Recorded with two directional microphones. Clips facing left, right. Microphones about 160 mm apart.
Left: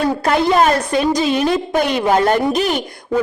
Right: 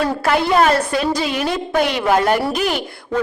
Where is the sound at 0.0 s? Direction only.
15° left (ahead or behind).